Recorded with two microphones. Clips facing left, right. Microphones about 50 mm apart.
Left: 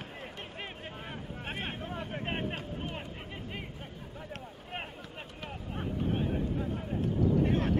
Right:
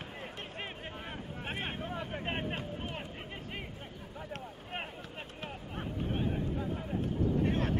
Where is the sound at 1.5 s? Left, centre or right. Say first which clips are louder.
Even; centre.